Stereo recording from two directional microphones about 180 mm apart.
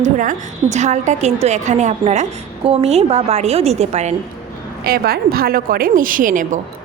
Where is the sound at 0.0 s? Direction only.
45° right (ahead or behind).